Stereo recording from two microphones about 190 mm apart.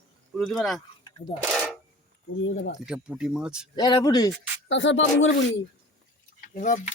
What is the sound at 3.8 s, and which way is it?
Speech, 20° left (ahead or behind).